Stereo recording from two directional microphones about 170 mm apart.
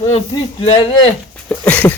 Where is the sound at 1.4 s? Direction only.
10° left (ahead or behind).